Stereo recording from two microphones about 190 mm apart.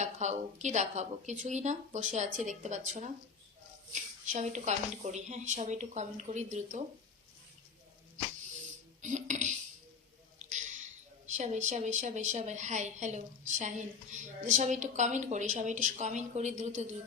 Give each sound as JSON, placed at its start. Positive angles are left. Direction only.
{"t": 0.0, "sound": "a woman's voice", "side_deg": -40}
{"t": 4.3, "sound": "a woman's voice", "side_deg": -40}
{"t": 9.0, "sound": "a sound", "side_deg": -40}
{"t": 11.3, "sound": "a woman's voice", "side_deg": -40}